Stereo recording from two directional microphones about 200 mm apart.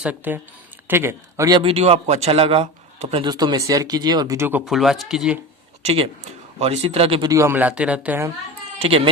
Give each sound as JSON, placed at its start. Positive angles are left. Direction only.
{"t": 0.0, "sound": "a man's voice", "side_deg": -10}
{"t": 5.8, "sound": "speech", "side_deg": -30}
{"t": 7.3, "sound": "speech", "side_deg": -15}
{"t": 8.8, "sound": "speech", "side_deg": -30}